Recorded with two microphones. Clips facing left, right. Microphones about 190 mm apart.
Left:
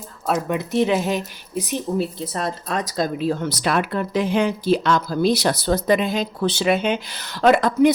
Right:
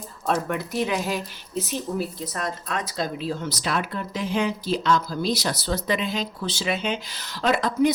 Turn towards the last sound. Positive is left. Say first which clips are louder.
# left 6 dB
turn(degrees=60)  # may be behind; listen again after turning